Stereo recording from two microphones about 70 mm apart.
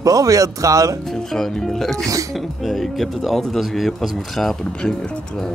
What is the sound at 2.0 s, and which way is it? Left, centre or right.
Speech, right.